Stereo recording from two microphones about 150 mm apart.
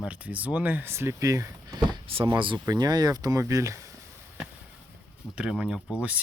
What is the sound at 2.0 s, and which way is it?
Speech, 35° right (ahead or behind).